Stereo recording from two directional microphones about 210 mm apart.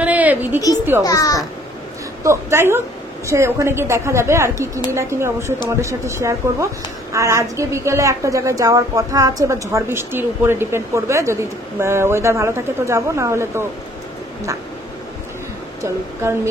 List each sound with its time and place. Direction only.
0.0 s a sound: 5° right (ahead or behind)
1.0 s a child's voice: 15° left (ahead or behind)
2.2 s a woman's voice: 10° right (ahead or behind)
15.8 s a woman's voice: 10° right (ahead or behind)